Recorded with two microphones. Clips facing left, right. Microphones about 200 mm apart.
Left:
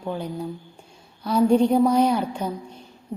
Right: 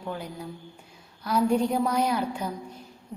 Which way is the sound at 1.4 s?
25° left (ahead or behind).